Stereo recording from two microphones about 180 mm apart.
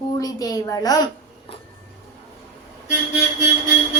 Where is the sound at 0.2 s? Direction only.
20° left (ahead or behind).